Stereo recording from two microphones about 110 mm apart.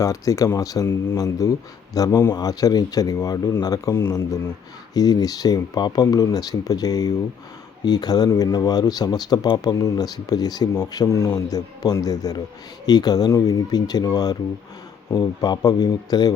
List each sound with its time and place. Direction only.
0.0 s speech: 30° left (ahead or behind)
4.9 s speech: 35° left (ahead or behind)